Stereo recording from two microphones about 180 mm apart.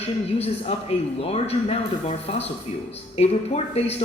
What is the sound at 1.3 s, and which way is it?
Speech, 35° left (ahead or behind).